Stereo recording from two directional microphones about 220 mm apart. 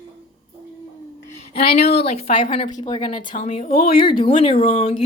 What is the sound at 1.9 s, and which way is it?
Speech, 30° left (ahead or behind).